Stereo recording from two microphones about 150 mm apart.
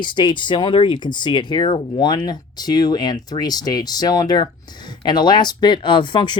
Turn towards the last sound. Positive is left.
turn(degrees=30)  # may be behind; listen again after turning